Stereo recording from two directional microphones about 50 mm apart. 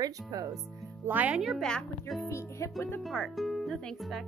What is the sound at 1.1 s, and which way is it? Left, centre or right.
Speech, right.